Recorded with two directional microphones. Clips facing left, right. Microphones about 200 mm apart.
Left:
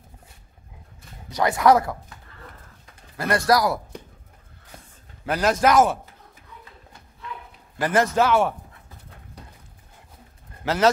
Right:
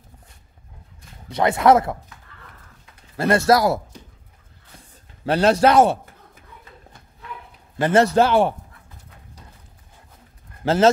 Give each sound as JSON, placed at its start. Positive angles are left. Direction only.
{"t": 1.3, "sound": "speech", "side_deg": -25}
{"t": 3.2, "sound": "speech", "side_deg": -25}
{"t": 5.2, "sound": "a man's voice", "side_deg": -30}
{"t": 7.8, "sound": "a man's voice", "side_deg": -30}
{"t": 10.6, "sound": "speech", "side_deg": -25}